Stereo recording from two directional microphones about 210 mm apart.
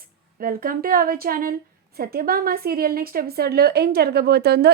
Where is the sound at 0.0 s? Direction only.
45° right (ahead or behind).